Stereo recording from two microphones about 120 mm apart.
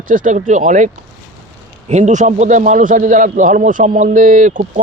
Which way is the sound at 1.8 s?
80° right.